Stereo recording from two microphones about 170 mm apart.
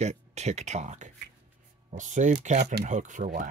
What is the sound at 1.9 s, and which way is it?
Speech, 45° right (ahead or behind).